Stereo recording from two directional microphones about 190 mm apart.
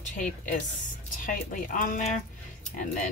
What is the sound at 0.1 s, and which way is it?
Speech, 40° left (ahead or behind).